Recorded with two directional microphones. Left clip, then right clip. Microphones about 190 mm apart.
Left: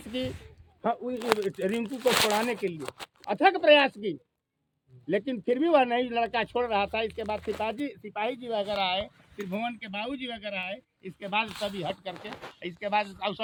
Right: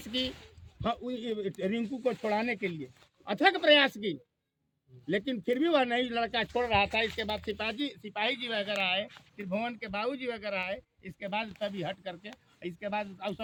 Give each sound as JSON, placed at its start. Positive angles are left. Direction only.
{"t": 0.0, "sound": "speech", "side_deg": -10}
{"t": 5.0, "sound": "speech", "side_deg": -15}
{"t": 6.5, "sound": "speech", "side_deg": 0}
{"t": 7.2, "sound": "speech", "side_deg": -10}
{"t": 11.2, "sound": "speech", "side_deg": -55}
{"t": 11.6, "sound": "speech", "side_deg": -10}